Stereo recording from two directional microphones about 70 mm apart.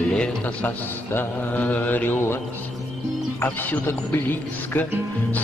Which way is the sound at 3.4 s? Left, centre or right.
Left.